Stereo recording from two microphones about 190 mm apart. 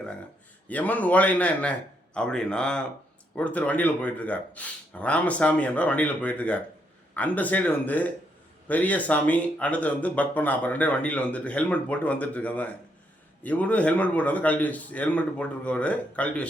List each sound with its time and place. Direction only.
0.7 s a man's voice: 10° left (ahead or behind)